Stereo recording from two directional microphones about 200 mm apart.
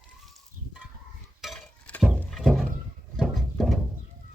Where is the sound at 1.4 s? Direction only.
Centre (ahead or behind).